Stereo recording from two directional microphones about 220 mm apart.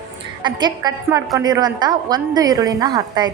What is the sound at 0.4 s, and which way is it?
A woman's voice, 20° right (ahead or behind).